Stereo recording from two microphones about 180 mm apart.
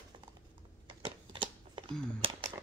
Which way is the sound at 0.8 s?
30° right (ahead or behind).